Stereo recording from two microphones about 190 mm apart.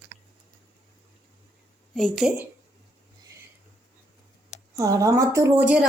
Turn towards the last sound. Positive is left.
turn(degrees=-10)  # may be behind; listen again after turning